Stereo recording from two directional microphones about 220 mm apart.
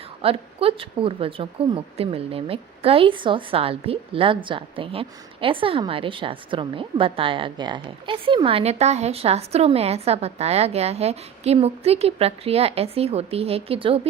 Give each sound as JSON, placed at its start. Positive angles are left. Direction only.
{"t": 0.2, "sound": "speech", "side_deg": -25}